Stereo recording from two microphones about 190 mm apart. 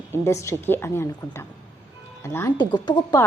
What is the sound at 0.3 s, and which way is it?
A woman's voice, 15° left (ahead or behind).